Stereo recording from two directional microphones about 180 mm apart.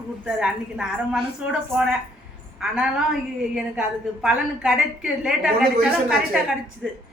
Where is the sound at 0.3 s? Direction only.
5° right (ahead or behind).